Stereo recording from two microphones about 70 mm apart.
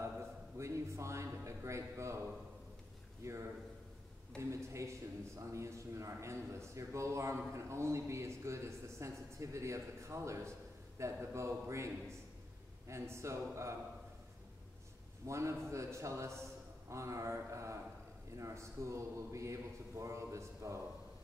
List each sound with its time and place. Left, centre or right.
0.6 s a sound: right
3.2 s a man's voice: right
15.2 s a man's voice: right